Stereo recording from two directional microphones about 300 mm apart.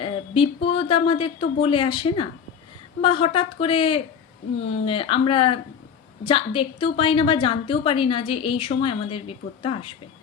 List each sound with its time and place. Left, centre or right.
0.0 s a woman's voice: centre